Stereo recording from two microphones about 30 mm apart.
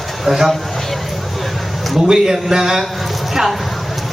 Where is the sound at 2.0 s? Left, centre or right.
Centre.